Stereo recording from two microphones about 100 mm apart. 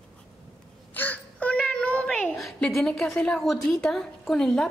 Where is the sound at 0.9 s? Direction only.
15° left (ahead or behind).